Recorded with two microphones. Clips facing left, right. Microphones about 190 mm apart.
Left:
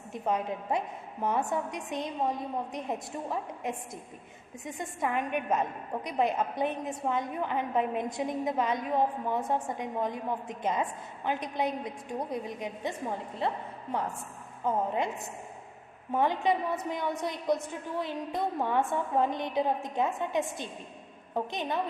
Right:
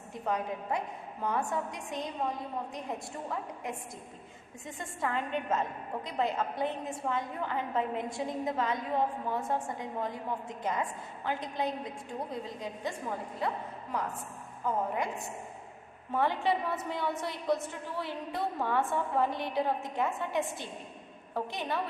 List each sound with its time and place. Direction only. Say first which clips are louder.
0.1 s a woman's voice: left 3 dB; 20° left (ahead or behind)
14.6 s a woman's voice: left 3 dB; 25° left (ahead or behind)
16.1 s a woman's voice: left 2 dB; 15° left (ahead or behind)